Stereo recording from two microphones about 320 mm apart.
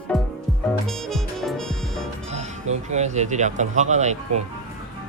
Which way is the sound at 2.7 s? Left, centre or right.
Right.